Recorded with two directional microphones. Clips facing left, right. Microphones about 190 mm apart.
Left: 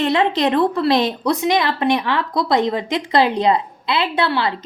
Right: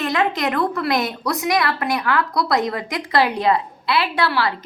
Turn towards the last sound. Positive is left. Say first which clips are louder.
# left 1 dB
turn(degrees=25)  # may be behind; listen again after turning